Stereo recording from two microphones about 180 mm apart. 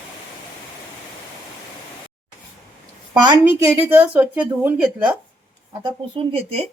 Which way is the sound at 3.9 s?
10° right (ahead or behind).